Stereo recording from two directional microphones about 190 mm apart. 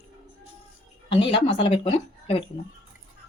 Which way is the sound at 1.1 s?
25° left (ahead or behind).